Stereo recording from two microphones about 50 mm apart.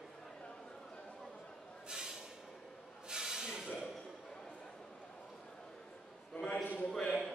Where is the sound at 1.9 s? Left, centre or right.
Centre.